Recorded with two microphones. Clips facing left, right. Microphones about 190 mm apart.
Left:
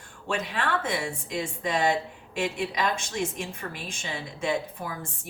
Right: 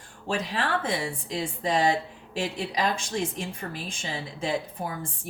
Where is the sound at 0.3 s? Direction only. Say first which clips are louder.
Right 1 dB; 30° right (ahead or behind).